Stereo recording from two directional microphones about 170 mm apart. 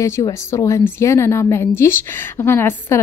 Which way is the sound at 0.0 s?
15° left (ahead or behind).